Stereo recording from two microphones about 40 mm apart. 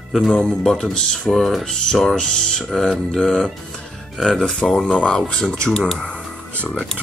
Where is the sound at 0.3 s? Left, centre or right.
Centre.